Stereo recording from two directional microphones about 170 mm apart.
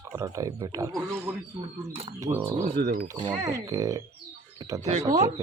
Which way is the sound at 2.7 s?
70° right (ahead or behind).